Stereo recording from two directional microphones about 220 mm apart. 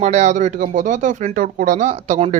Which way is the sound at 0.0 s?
30° right (ahead or behind).